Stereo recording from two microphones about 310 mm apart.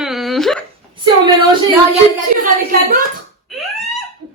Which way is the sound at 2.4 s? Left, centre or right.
Right.